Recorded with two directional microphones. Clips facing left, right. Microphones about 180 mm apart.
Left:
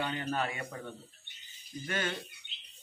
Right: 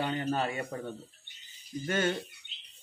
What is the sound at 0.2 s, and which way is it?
Maraca, 30° right (ahead or behind).